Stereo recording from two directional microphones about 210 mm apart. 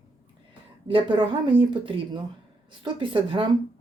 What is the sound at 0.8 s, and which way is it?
A woman's voice, 25° right (ahead or behind).